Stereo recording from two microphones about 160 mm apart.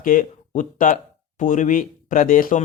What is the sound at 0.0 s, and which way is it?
Speech, 55° left (ahead or behind).